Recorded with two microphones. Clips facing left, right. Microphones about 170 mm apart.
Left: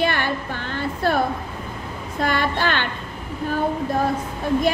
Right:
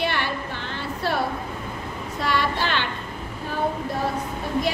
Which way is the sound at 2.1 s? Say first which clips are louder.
Left 2 dB; 50° left (ahead or behind).